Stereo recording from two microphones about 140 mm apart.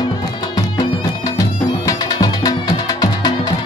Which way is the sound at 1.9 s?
25° left (ahead or behind).